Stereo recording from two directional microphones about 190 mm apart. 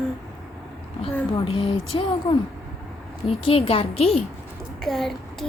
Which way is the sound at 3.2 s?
30° left (ahead or behind).